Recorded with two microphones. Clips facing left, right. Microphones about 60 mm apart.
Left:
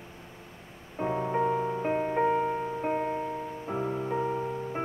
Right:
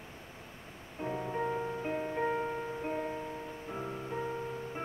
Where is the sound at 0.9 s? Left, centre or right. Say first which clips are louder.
Left 7 dB; left.